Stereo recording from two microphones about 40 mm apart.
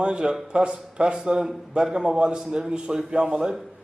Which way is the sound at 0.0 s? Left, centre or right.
Right.